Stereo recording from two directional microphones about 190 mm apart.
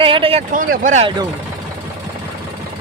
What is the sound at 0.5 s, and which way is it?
Speech, 45° right (ahead or behind).